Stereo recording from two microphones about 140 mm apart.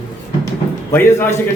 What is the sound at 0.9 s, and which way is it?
Speech, 15° left (ahead or behind).